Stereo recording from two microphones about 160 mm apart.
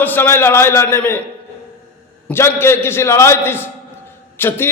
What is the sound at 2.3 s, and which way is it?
A man's voice, 15° left (ahead or behind).